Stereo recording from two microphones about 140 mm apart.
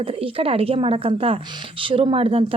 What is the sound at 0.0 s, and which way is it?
A woman's voice, 40° right (ahead or behind).